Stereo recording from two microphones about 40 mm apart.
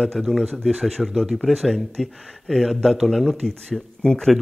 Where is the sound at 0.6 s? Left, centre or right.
Centre.